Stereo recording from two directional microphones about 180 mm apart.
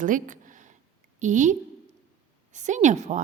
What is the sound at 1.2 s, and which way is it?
A woman's voice, 45° right (ahead or behind).